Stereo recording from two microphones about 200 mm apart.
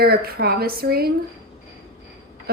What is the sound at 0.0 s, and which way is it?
A woman's voice, 50° right (ahead or behind).